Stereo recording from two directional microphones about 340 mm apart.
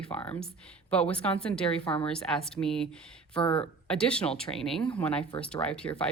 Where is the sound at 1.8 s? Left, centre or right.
Centre.